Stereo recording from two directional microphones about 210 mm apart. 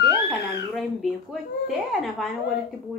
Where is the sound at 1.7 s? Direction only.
Centre (ahead or behind).